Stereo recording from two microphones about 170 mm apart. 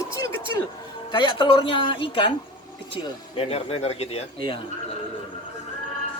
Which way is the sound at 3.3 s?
35° left (ahead or behind).